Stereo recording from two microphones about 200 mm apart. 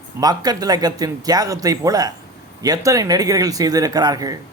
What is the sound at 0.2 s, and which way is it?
Speech, 20° right (ahead or behind).